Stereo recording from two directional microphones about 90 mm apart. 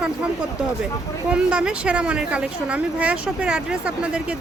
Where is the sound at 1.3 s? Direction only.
10° right (ahead or behind).